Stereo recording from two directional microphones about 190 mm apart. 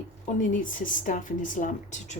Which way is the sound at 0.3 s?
45° left (ahead or behind).